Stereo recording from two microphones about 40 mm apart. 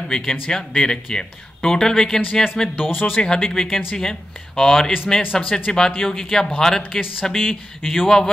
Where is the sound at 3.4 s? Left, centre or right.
Centre.